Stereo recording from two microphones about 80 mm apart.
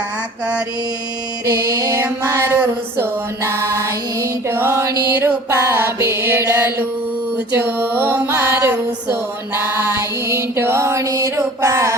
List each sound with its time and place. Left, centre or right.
1.5 s music: right
2.2 s mantra: right
7.5 s music: right
9.6 s mantra: right